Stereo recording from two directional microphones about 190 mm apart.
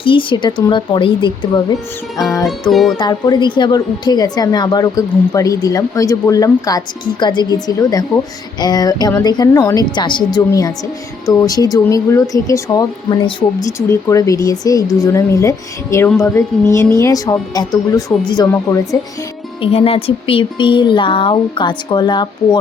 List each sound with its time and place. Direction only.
0.0 s a woman's voice: 25° left (ahead or behind)
2.4 s music: centre (ahead or behind)
3.0 s a woman's voice: 20° left (ahead or behind)
19.6 s a woman's voice: 30° left (ahead or behind)